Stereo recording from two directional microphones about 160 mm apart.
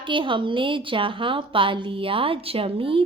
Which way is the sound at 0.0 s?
30° right (ahead or behind).